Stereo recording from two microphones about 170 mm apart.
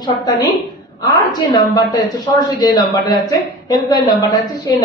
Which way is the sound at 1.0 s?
25° left (ahead or behind).